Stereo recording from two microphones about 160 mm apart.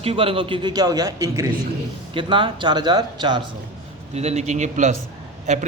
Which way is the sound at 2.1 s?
30° right (ahead or behind).